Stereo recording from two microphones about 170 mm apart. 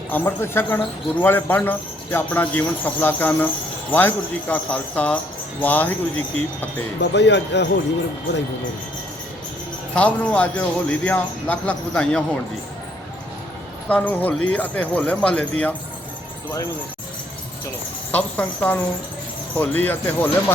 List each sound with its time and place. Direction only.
0.1 s speech: 15° left (ahead or behind)
7.0 s speech: 90° left
9.9 s speech: 5° left (ahead or behind)
13.8 s speech: 10° left (ahead or behind)
18.1 s speech: 10° left (ahead or behind)